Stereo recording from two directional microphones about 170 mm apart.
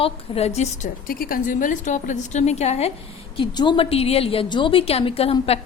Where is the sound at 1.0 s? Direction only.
55° left (ahead or behind); by 2.9 s 40° left (ahead or behind).